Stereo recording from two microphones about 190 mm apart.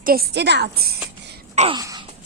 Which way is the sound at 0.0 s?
55° right (ahead or behind).